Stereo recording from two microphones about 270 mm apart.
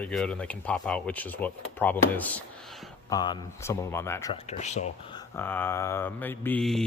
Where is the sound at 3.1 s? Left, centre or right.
Centre.